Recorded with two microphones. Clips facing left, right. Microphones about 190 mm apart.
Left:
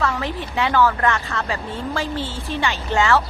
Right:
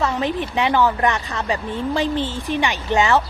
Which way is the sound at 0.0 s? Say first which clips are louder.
Right 3 dB; 20° right (ahead or behind).